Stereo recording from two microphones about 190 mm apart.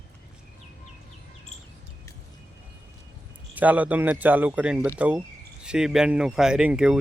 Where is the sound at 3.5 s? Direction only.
10° right (ahead or behind).